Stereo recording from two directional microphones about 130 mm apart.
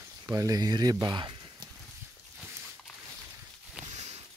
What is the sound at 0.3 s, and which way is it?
Speech, 25° right (ahead or behind).